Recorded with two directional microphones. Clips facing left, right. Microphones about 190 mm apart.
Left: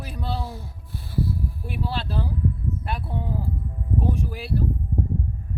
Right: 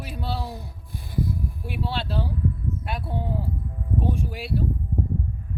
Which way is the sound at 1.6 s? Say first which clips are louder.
Right 1 dB; centre (ahead or behind).